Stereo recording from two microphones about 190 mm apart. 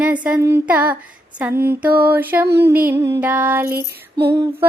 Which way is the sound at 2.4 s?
60° right (ahead or behind).